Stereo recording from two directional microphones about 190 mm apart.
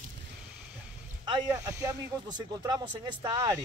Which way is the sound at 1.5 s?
15° right (ahead or behind).